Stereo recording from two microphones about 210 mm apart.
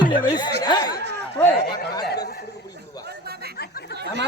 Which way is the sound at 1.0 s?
55° right (ahead or behind).